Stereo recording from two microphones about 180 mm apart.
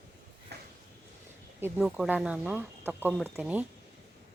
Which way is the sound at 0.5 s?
65° right (ahead or behind).